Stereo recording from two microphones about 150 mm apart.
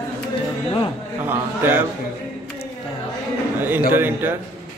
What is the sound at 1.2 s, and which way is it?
Speech, 15° right (ahead or behind).